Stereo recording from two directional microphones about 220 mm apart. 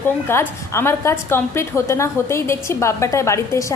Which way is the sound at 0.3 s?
10° left (ahead or behind).